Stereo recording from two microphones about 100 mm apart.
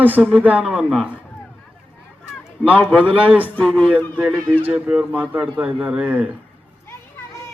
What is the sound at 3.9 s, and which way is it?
A man's voice, 15° right (ahead or behind).